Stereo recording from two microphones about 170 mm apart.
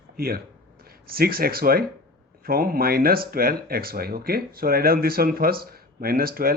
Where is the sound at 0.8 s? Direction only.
60° right (ahead or behind).